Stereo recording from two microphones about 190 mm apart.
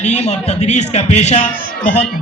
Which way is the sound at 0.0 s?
35° left (ahead or behind).